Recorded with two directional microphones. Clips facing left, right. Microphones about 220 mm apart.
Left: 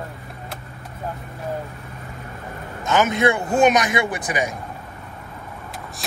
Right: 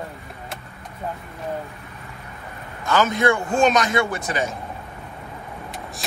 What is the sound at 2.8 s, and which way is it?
Speech, 20° left (ahead or behind).